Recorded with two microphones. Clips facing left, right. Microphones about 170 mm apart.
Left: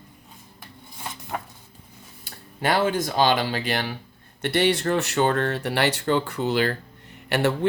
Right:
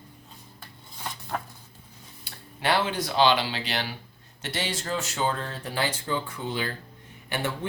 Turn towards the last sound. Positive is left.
turn(degrees=70)  # may be behind; listen again after turning